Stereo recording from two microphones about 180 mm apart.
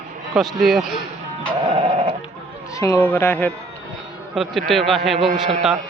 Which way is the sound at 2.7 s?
20° left (ahead or behind).